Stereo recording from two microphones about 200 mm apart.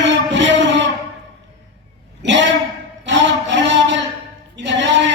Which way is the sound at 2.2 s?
65° right (ahead or behind).